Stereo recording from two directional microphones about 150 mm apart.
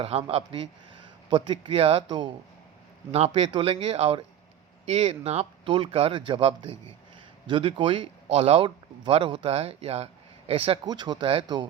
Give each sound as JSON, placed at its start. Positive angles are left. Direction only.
{"t": 0.0, "sound": "speech", "side_deg": -40}
{"t": 10.8, "sound": "speech", "side_deg": -30}